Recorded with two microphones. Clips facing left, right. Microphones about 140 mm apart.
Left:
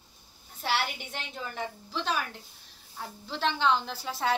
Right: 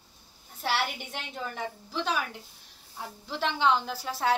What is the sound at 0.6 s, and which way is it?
A woman's voice, 5° right (ahead or behind).